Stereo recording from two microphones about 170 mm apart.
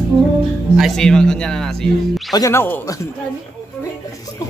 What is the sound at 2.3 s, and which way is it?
Speech, 20° left (ahead or behind).